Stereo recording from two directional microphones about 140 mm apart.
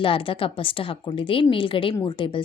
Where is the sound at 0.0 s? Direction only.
40° left (ahead or behind).